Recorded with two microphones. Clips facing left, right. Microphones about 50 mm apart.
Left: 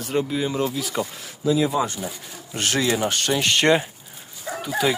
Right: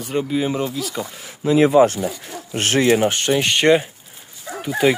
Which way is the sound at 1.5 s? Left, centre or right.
Right.